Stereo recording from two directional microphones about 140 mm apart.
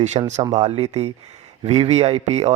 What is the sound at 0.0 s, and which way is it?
Speech, 55° right (ahead or behind).